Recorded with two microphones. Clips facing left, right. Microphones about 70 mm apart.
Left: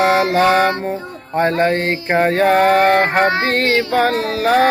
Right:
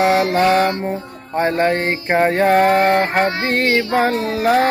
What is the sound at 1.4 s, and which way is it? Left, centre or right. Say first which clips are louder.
Mantra: left 1 dB; centre.